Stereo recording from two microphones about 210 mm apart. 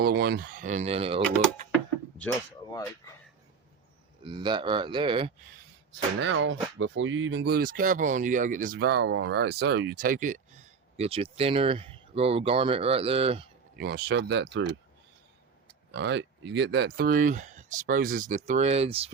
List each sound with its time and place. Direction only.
0.0 s speech: 50° right (ahead or behind); by 1.2 s 25° right (ahead or behind)
4.2 s speech: 25° right (ahead or behind)
6.1 s speech: 60° right (ahead or behind)
9.9 s speech: 40° right (ahead or behind)
13.7 s speech: 50° right (ahead or behind)
15.9 s speech: 55° right (ahead or behind); by 19.1 s 25° right (ahead or behind)